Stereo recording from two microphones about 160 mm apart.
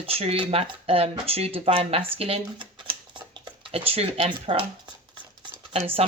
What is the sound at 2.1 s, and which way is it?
Shuffling cards, 40° right (ahead or behind).